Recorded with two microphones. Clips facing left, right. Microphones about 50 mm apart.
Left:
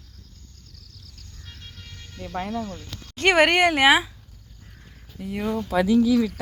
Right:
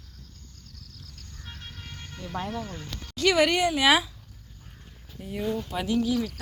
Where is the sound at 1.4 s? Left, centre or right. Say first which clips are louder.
Right 2 dB; centre.